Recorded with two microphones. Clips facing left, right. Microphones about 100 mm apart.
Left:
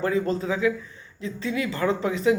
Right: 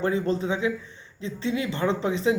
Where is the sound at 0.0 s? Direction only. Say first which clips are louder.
Even; 25° right (ahead or behind).